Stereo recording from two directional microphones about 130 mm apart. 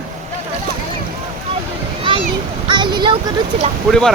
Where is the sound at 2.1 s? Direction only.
40° right (ahead or behind).